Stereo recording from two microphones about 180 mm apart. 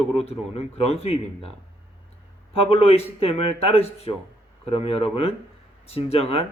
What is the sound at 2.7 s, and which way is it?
Speech, 35° left (ahead or behind).